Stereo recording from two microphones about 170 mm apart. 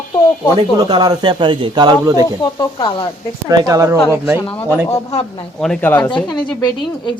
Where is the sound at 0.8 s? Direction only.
25° right (ahead or behind).